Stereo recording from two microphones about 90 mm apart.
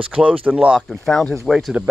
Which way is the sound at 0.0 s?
15° right (ahead or behind).